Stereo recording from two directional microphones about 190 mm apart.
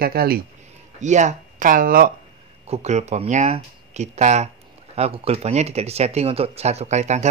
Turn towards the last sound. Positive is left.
turn(degrees=-35)  # may be behind; listen again after turning